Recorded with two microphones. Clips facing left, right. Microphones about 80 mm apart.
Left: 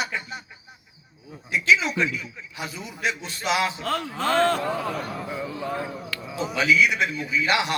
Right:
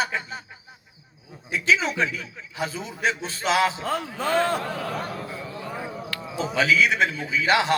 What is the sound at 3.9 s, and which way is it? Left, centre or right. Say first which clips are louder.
Speech: left 1 dB; centre.